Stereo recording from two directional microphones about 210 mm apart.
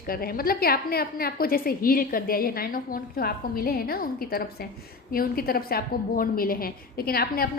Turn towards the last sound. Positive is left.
turn(degrees=45)  # may be behind; listen again after turning